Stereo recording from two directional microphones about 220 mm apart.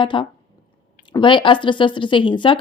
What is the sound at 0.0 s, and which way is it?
Speech, 20° left (ahead or behind).